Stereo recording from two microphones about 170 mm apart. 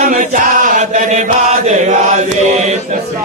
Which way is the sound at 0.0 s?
55° right (ahead or behind).